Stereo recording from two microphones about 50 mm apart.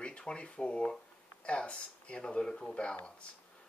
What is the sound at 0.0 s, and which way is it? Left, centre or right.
Speech, left.